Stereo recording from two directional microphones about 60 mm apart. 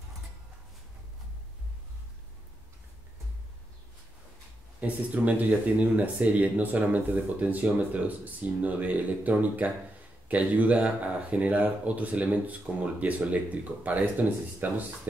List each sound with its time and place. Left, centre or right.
4.7 s speech: right